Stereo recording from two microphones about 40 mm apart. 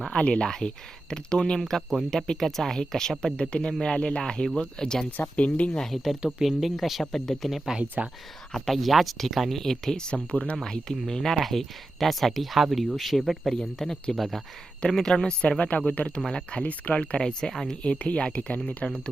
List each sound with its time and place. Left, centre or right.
0.1 s speech: left
5.4 s speech: left
5.8 s speech: centre
7.0 s speech: centre
8.0 s speech: right
8.5 s speech: centre
10.3 s speech: left
10.6 s speech: centre
14.9 s speech: centre; by 15.8 s left
16.0 s speech: left
16.3 s speech: left
16.6 s speech: left
17.2 s speech: centre
17.8 s speech: left